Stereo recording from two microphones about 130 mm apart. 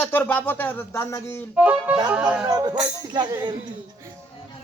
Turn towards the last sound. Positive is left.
turn(degrees=-35)  # may be behind; listen again after turning